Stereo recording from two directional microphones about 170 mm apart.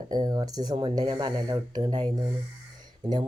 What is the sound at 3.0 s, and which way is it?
Speech, 25° right (ahead or behind).